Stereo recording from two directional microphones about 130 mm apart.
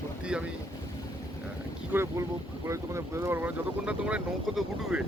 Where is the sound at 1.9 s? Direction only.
15° right (ahead or behind).